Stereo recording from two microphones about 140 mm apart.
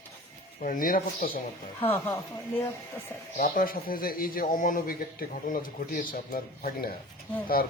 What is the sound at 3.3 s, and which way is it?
Speech, 80° left.